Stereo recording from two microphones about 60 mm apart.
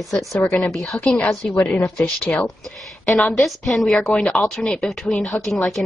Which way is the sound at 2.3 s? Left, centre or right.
Left.